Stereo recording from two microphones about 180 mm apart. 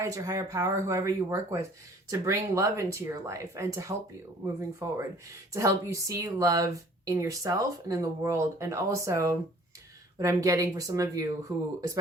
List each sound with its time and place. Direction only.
0.0 s speech: 20° right (ahead or behind)